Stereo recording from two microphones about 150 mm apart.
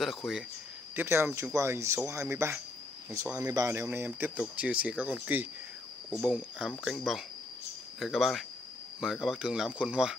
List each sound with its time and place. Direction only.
0.0 s speech: centre (ahead or behind)
0.9 s speech: 15° right (ahead or behind)